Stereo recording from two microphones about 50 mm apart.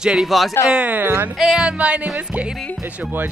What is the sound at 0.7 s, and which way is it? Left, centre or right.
Speech, right.